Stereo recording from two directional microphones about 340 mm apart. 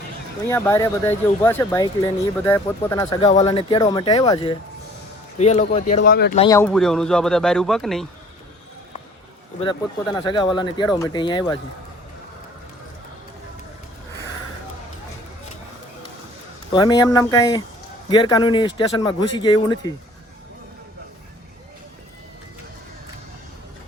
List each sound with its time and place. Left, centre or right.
0.5 s speech: centre; by 6.4 s left
6.4 s speech: centre
9.6 s speech: centre
16.7 s speech: centre